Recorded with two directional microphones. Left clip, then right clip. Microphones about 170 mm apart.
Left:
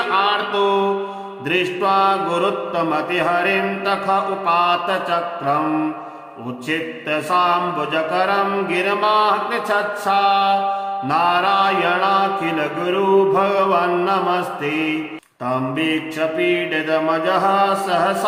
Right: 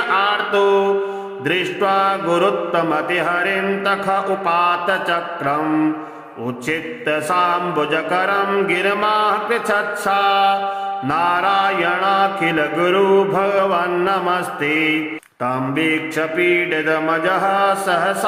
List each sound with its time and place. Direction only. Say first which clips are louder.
0.1 s mantra: right 2 dB; 20° right (ahead or behind)
6.7 s mantra: right 1 dB; 25° right (ahead or behind)
15.8 s mantra: right 1 dB; 25° right (ahead or behind)